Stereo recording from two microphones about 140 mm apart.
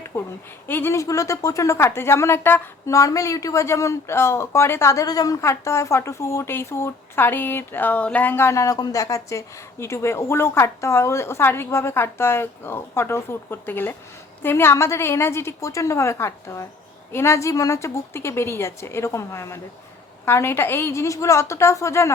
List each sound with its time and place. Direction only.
0.1 s a woman's voice: 15° left (ahead or behind)